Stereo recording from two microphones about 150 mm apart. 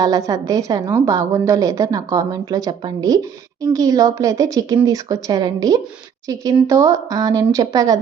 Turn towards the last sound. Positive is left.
turn(degrees=-25)  # may be behind; listen again after turning